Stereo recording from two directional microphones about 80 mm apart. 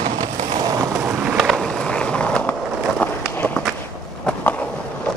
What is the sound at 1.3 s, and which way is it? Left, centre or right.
Skateboard, centre.